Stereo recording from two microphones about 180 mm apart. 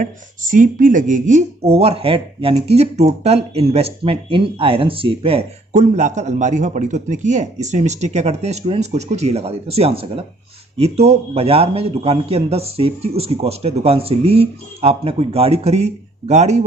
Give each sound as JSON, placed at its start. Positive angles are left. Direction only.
{"t": 0.0, "sound": "speech", "side_deg": -45}